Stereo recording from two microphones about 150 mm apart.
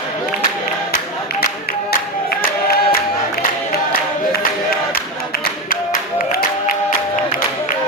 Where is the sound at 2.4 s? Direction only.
75° left (ahead or behind).